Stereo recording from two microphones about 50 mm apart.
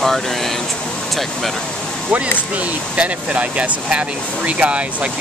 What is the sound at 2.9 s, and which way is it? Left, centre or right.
Speech, right.